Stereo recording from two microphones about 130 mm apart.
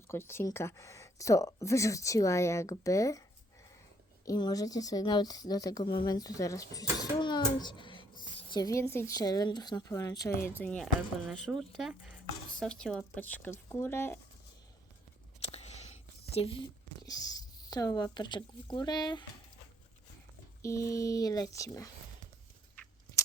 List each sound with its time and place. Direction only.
0.1 s speech: 20° left (ahead or behind)
4.3 s speech: 30° left (ahead or behind)
7.0 s a sound: 35° left (ahead or behind)
8.4 s speech: 30° left (ahead or behind); by 10.8 s 10° left (ahead or behind)
11.3 s speech: centre (ahead or behind); by 14.2 s 15° left (ahead or behind)
15.4 s a sound: 55° left (ahead or behind)
17.1 s speech: 30° left (ahead or behind)
20.6 s speech: 25° left (ahead or behind)